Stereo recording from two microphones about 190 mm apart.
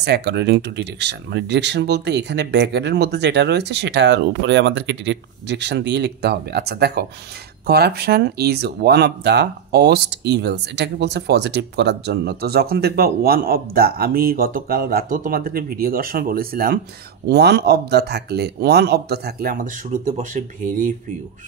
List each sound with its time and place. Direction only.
0.0 s speech: 60° right (ahead or behind); by 20.9 s 45° right (ahead or behind)